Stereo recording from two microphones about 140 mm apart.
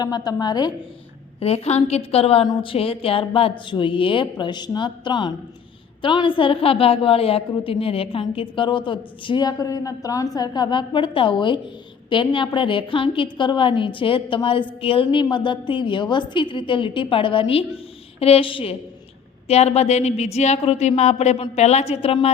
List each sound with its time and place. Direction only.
0.3 s a woman's voice: 30° left (ahead or behind)
1.4 s a woman's voice: 45° left (ahead or behind)